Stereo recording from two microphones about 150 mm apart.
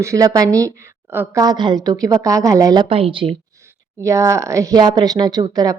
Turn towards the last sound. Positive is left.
turn(degrees=-25)  # may be behind; listen again after turning